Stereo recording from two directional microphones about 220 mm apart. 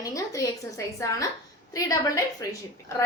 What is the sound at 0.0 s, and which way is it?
A woman's voice, 15° left (ahead or behind).